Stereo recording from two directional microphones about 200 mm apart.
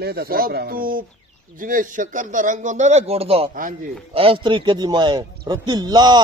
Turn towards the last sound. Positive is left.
turn(degrees=-20)  # may be behind; listen again after turning